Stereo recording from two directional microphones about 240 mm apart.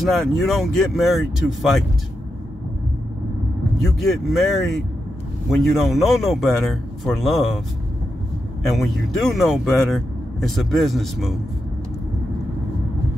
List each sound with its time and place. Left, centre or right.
0.0 s speech: centre
4.0 s speech: centre
8.6 s speech: centre